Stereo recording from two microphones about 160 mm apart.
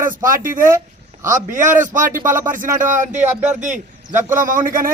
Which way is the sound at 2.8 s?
50° right (ahead or behind).